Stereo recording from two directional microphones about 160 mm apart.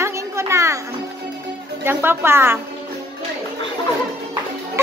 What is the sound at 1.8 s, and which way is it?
Speech, 15° right (ahead or behind).